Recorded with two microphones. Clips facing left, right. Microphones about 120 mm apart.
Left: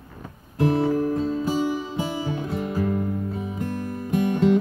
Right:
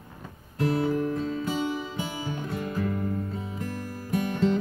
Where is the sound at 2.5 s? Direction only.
10° left (ahead or behind).